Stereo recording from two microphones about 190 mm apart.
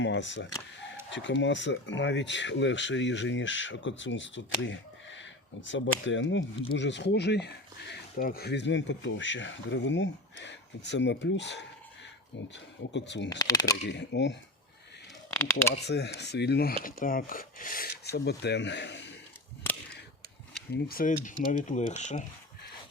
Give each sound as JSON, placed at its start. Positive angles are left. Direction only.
{"t": 0.0, "sound": "speech", "side_deg": 70}
{"t": 12.9, "sound": "speech", "side_deg": 70}
{"t": 13.4, "sound": "speech", "side_deg": 20}
{"t": 13.8, "sound": "speech", "side_deg": 65}
{"t": 15.3, "sound": "speech", "side_deg": 15}
{"t": 15.7, "sound": "speech", "side_deg": 60}
{"t": 17.0, "sound": "speech", "side_deg": 50}
{"t": 20.7, "sound": "speech", "side_deg": 50}